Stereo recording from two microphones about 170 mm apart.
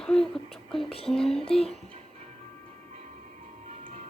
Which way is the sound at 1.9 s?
40° right (ahead or behind).